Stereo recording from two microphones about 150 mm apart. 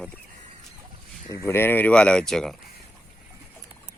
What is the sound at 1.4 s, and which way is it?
Speech, 15° left (ahead or behind).